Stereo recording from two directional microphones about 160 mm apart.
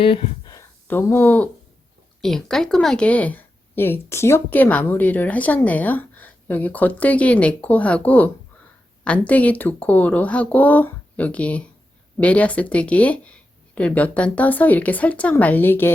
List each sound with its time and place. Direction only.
0.0 s speech: 35° left (ahead or behind)
0.5 s a sound: 15° left (ahead or behind)
2.2 s speech: centre (ahead or behind)